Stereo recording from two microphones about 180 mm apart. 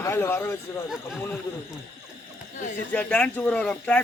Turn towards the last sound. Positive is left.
turn(degrees=5)  # may be behind; listen again after turning